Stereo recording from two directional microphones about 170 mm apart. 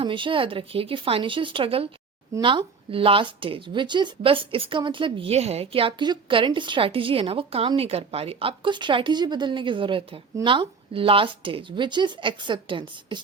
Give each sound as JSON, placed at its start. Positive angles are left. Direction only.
{"t": 0.0, "sound": "speech", "side_deg": -30}